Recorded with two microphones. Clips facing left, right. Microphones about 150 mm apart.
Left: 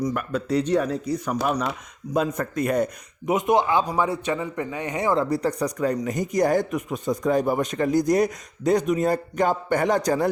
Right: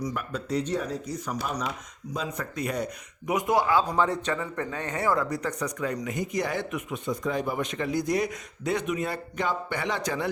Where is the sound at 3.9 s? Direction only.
10° left (ahead or behind).